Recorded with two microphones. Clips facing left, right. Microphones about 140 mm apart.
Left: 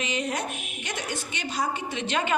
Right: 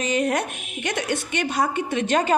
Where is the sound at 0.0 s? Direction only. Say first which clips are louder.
Right 7 dB; 50° right (ahead or behind).